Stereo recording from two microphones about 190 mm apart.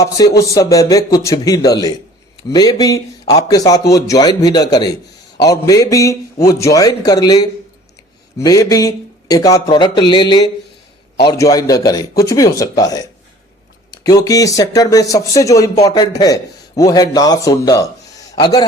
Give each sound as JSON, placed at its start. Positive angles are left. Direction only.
{"t": 0.0, "sound": "speech", "side_deg": 15}